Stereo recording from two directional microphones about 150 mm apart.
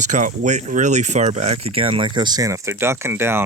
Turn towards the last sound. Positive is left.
turn(degrees=-15)  # may be behind; listen again after turning